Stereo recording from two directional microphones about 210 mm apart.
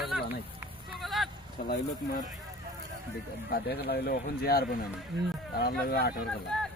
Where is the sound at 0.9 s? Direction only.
Centre (ahead or behind).